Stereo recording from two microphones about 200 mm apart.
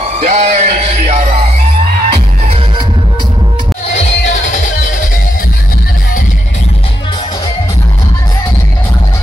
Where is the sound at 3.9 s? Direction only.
40° left (ahead or behind).